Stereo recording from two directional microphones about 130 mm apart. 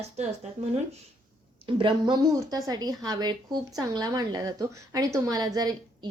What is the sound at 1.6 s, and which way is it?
A woman's voice, 40° right (ahead or behind).